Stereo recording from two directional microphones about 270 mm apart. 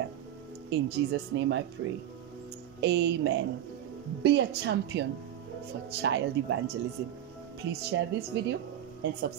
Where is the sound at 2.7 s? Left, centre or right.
Right.